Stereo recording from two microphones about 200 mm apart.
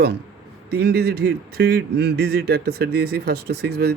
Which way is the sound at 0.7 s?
55° right (ahead or behind).